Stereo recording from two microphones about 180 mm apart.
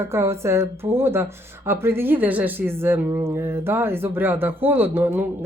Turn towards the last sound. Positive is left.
turn(degrees=-10)  # may be behind; listen again after turning